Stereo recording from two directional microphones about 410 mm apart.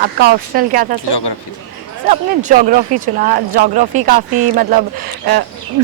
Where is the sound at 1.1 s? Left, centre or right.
Left.